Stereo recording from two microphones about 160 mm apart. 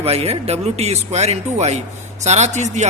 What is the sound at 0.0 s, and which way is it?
A man's voice, 40° right (ahead or behind).